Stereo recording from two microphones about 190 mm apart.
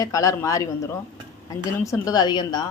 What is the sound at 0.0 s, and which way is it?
A man's voice, 15° left (ahead or behind).